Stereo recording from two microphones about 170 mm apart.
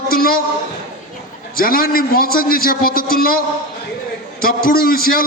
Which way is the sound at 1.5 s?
60° left (ahead or behind).